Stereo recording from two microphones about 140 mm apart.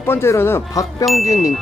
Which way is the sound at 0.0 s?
15° left (ahead or behind).